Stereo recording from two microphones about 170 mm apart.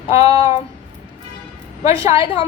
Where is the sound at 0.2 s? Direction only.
35° left (ahead or behind).